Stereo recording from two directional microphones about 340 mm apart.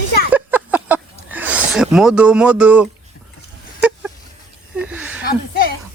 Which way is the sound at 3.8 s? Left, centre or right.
Centre.